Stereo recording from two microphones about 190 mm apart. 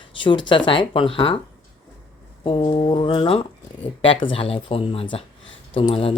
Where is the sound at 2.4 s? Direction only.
30° left (ahead or behind).